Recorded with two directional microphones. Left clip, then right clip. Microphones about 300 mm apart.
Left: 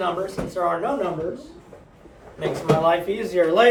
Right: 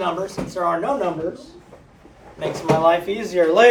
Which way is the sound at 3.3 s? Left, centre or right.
Right.